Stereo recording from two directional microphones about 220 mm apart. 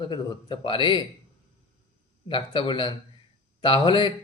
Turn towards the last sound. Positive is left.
turn(degrees=20)  # may be behind; listen again after turning